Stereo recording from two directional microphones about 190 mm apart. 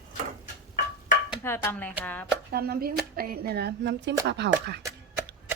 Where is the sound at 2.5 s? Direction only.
55° right (ahead or behind).